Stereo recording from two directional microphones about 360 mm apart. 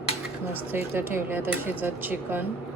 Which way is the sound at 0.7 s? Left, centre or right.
Centre.